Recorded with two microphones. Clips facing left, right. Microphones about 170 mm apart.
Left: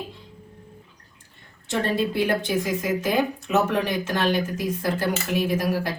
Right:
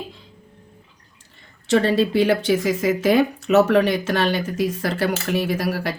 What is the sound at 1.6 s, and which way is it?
Speech, 90° right.